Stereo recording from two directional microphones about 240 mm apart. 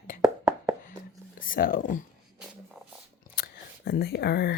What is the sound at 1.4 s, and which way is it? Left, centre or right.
Speech, left.